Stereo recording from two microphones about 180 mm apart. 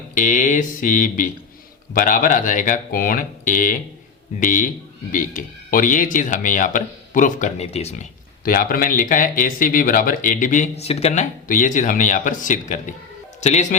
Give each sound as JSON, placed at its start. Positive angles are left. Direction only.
{"t": 0.1, "sound": "speech", "side_deg": 45}
{"t": 8.4, "sound": "speech", "side_deg": 50}